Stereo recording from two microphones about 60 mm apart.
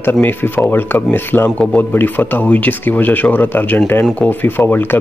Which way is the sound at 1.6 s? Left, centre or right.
Left.